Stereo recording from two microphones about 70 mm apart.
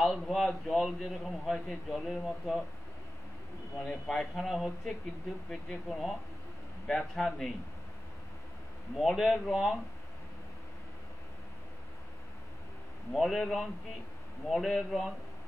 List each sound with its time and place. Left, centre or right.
0.0 s a man's voice: centre
3.8 s a man's voice: centre
8.9 s a man's voice: centre
13.1 s a man's voice: centre